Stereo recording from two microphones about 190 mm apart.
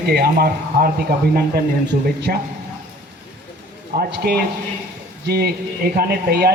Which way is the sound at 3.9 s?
50° right (ahead or behind).